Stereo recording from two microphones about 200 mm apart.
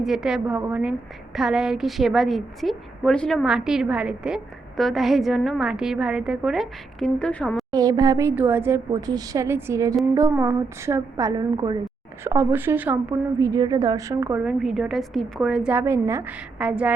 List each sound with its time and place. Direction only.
0.0 s a woman's voice: centre (ahead or behind)
7.7 s a woman's voice: 20° right (ahead or behind)